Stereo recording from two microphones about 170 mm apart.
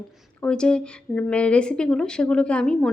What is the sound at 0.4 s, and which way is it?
Speech, 5° left (ahead or behind).